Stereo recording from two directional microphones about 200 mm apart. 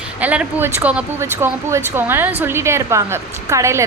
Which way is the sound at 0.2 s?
5° right (ahead or behind).